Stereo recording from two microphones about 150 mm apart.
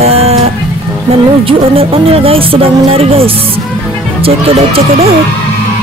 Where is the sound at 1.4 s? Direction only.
40° right (ahead or behind).